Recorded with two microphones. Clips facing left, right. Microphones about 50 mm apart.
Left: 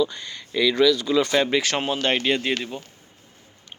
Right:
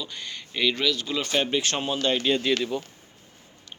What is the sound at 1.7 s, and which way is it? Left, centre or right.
Speech, left.